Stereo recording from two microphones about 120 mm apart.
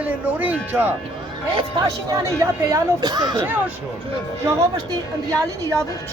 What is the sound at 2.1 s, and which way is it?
Speech, 30° right (ahead or behind).